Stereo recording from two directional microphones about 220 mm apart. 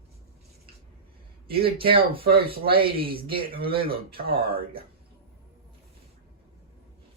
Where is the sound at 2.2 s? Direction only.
45° right (ahead or behind).